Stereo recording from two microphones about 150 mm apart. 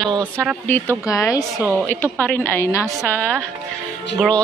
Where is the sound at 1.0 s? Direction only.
20° left (ahead or behind).